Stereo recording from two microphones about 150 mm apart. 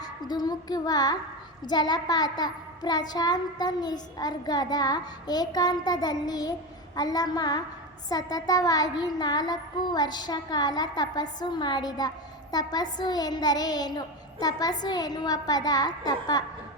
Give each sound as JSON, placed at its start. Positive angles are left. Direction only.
{"t": 0.0, "sound": "music", "side_deg": 25}
{"t": 1.6, "sound": "child singing", "side_deg": 30}